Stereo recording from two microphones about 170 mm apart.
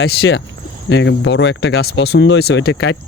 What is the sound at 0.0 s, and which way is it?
Speech, 80° left.